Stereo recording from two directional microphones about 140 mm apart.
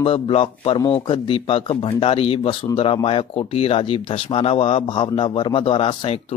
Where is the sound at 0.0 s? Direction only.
40° left (ahead or behind).